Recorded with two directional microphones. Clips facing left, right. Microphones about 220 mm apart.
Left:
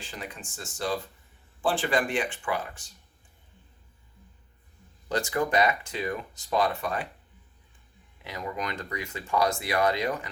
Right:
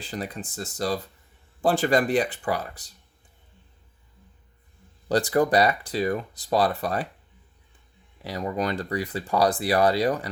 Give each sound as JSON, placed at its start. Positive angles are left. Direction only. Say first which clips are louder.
{"t": 0.0, "sound": "speech", "louder": "right 7 dB", "side_deg": -35}
{"t": 5.0, "sound": "speech", "louder": "right 6 dB", "side_deg": -35}
{"t": 8.2, "sound": "speech", "louder": "right 7 dB", "side_deg": -35}